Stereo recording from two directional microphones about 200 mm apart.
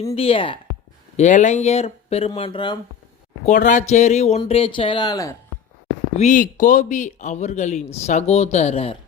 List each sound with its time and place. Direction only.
0.0 s a woman's voice: 30° left (ahead or behind)
1.1 s speech: 35° left (ahead or behind)
3.4 s speech: 40° left (ahead or behind); by 5.4 s 15° left (ahead or behind)
6.1 s speech: 40° left (ahead or behind)